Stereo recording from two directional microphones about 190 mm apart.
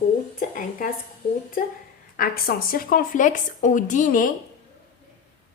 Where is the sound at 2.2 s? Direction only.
50° left (ahead or behind).